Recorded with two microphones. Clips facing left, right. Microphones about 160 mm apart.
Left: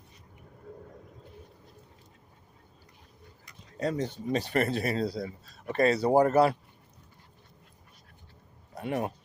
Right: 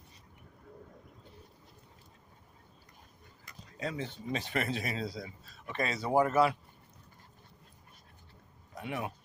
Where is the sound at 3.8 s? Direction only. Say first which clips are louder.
Left 7 dB; 40° left (ahead or behind).